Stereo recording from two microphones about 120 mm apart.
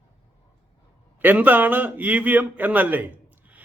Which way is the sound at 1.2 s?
15° right (ahead or behind).